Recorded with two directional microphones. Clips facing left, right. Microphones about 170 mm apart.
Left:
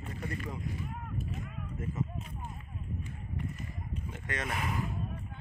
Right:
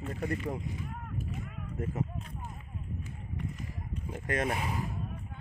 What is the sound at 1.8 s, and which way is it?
Speech, 50° right (ahead or behind).